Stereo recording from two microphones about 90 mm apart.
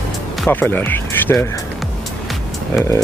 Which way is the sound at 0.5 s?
20° left (ahead or behind).